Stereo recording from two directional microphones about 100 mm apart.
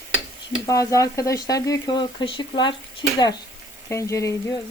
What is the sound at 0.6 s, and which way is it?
Speech, 35° left (ahead or behind).